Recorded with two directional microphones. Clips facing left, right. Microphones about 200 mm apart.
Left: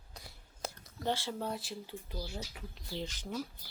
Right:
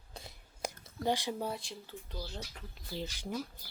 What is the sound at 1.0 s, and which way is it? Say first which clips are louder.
Speech: right 2 dB; 15° right (ahead or behind).